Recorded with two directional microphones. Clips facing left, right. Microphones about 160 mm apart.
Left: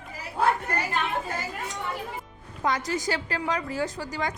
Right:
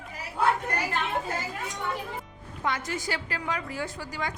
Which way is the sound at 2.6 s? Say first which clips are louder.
Left 4 dB; 40° left (ahead or behind).